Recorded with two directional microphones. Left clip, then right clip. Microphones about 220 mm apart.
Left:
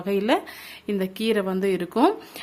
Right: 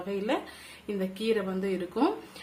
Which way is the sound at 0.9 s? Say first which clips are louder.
Left 5 dB; 45° left (ahead or behind).